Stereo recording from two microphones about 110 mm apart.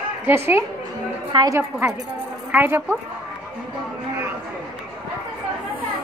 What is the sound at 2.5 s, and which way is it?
Speech, 20° right (ahead or behind).